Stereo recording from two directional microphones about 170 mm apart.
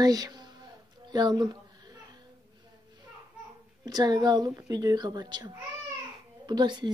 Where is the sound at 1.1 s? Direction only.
25° right (ahead or behind).